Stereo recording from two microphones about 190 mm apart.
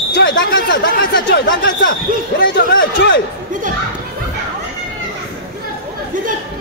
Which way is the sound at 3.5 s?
45° right (ahead or behind).